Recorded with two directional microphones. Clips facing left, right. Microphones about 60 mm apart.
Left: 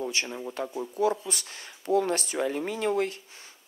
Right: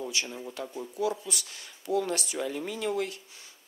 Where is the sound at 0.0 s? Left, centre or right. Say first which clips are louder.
Left 3 dB; left.